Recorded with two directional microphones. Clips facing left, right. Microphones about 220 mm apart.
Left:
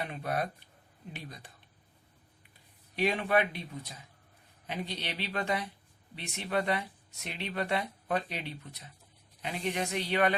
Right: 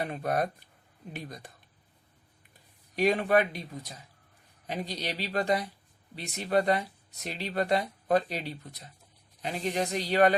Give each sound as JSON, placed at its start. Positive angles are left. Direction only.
{"t": 0.0, "sound": "speech", "side_deg": -45}
{"t": 2.9, "sound": "speech", "side_deg": -40}
{"t": 4.6, "sound": "speech", "side_deg": -40}